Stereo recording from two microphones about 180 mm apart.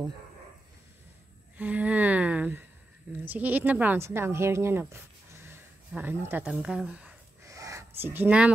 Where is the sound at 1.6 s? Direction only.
5° right (ahead or behind).